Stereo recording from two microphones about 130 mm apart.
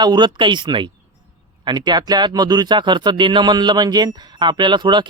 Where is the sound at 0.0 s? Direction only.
35° right (ahead or behind).